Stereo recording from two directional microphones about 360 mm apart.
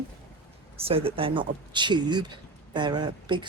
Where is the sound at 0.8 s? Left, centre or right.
Centre.